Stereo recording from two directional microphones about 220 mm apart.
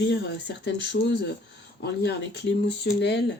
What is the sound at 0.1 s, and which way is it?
Speech, 50° left (ahead or behind).